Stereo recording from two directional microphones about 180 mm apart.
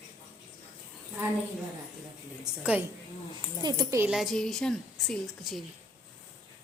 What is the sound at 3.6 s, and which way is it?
Speech, 20° right (ahead or behind).